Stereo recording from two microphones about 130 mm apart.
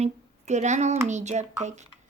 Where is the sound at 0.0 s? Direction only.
60° right (ahead or behind).